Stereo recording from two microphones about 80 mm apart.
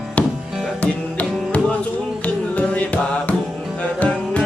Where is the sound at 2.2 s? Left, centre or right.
Centre.